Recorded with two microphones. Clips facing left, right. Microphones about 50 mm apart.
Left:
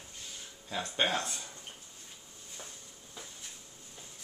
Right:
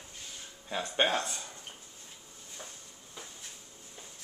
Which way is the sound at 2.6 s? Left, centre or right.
Centre.